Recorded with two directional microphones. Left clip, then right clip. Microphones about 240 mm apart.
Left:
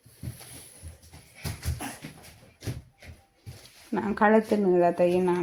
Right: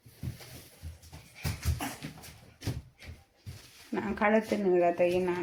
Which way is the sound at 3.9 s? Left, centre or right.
Left.